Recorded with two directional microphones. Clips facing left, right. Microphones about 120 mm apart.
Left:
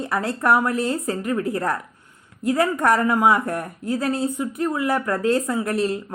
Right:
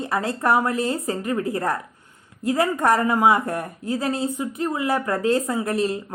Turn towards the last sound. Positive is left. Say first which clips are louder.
# even
turn(degrees=-20)  # may be behind; listen again after turning